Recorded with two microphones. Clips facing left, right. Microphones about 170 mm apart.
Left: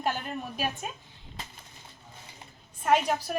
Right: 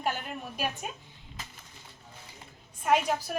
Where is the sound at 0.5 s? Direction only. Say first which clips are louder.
Even; 5° right (ahead or behind).